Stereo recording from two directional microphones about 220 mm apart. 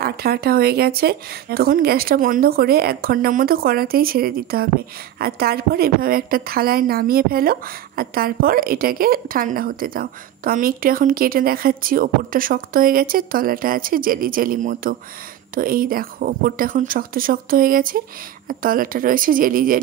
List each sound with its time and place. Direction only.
0.0 s a woman's voice: 45° right (ahead or behind)